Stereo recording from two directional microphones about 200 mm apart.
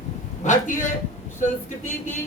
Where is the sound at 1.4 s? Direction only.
40° left (ahead or behind).